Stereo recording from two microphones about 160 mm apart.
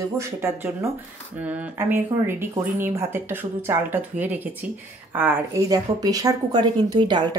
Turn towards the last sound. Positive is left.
turn(degrees=-25)  # may be behind; listen again after turning